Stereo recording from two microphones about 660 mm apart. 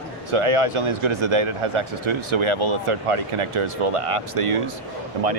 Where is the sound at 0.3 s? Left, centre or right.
Right.